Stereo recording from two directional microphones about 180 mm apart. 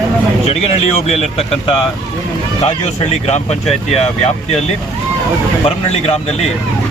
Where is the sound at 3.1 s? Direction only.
40° left (ahead or behind).